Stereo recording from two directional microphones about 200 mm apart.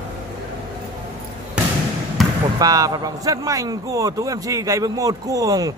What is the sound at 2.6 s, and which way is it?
A man's voice, 20° right (ahead or behind).